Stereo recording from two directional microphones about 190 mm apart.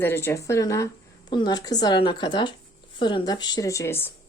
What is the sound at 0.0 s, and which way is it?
Speech, 10° left (ahead or behind).